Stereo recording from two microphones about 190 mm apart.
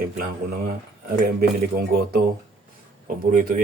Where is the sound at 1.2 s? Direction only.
55° right (ahead or behind).